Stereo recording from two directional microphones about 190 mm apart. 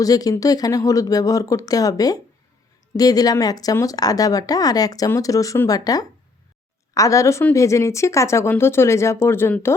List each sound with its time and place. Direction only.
0.0 s a woman's voice: 20° left (ahead or behind)